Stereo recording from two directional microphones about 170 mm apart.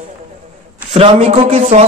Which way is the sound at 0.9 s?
35° right (ahead or behind).